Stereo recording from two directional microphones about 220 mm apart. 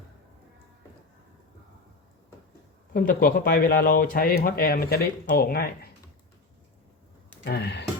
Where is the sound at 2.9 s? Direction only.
40° left (ahead or behind).